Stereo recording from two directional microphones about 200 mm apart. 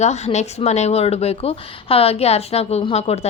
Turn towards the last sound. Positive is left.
turn(degrees=30)  # may be behind; listen again after turning